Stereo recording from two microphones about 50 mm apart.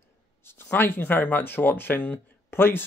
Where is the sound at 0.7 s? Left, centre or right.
Left.